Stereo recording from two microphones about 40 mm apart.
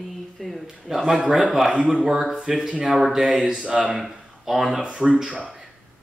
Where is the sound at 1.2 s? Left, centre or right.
Right.